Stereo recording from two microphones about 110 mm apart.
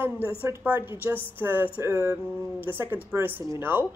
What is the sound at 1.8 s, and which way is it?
Speech, 30° right (ahead or behind).